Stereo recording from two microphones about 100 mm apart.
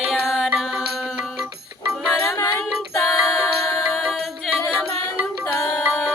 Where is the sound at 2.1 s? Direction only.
20° left (ahead or behind).